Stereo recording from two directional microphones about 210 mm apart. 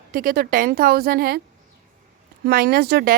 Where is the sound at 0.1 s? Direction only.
45° right (ahead or behind).